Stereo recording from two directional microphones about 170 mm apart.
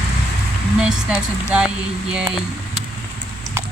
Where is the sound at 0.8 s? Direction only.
5° right (ahead or behind).